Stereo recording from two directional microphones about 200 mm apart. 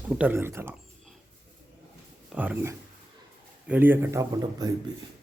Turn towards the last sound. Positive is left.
turn(degrees=-15)  # may be behind; listen again after turning